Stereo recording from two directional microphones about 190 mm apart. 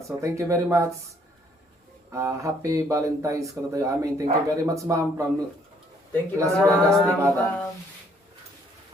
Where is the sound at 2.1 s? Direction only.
15° right (ahead or behind).